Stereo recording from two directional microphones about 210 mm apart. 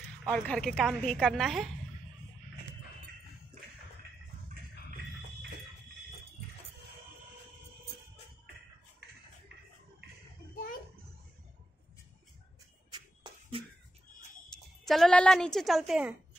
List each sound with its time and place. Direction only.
0.3 s a woman's voice: 5° left (ahead or behind)
12.9 s a sound: 20° right (ahead or behind)
14.9 s a woman's voice: centre (ahead or behind)